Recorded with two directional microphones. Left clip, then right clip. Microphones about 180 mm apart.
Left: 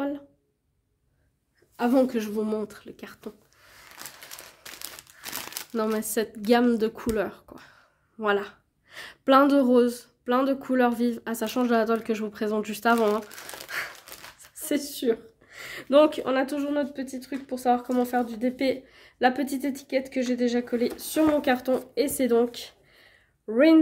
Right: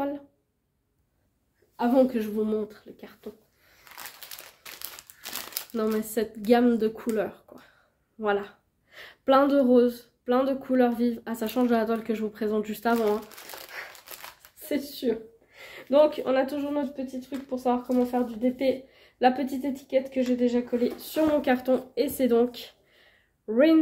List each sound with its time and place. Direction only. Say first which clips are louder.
1.8 s speech: even; 40° left (ahead or behind)
5.7 s a woman's voice: left 1 dB; 30° left (ahead or behind)
13.7 s a sound: left 8 dB; 55° left (ahead or behind)
14.6 s a woman's voice: left 2 dB; 35° left (ahead or behind)